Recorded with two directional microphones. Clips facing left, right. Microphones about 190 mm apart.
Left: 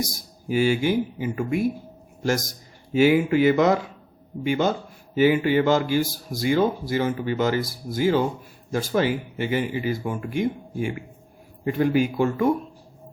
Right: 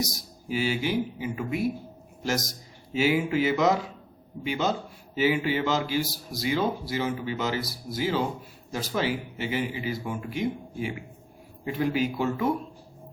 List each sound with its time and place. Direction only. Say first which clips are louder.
0.0 s a man's voice: left 2 dB; 50° left (ahead or behind)